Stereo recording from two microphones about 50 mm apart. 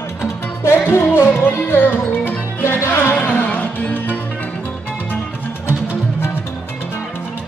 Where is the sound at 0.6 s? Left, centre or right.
Left.